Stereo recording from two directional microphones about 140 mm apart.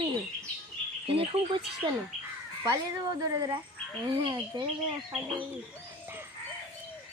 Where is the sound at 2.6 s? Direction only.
25° right (ahead or behind).